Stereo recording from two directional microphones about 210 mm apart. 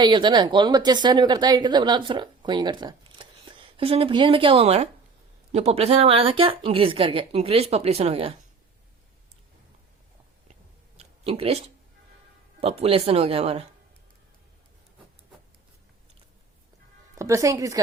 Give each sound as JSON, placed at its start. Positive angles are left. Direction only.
{"t": 0.0, "sound": "speech", "side_deg": -20}
{"t": 10.5, "sound": "a sound", "side_deg": -30}
{"t": 12.5, "sound": "speech", "side_deg": -30}
{"t": 17.2, "sound": "a woman's voice", "side_deg": -15}